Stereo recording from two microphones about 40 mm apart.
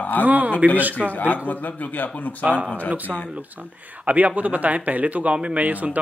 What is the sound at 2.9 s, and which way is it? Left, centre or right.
A man's voice, right.